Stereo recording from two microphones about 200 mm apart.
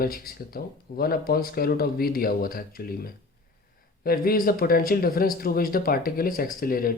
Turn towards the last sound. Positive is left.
turn(degrees=45)  # may be behind; listen again after turning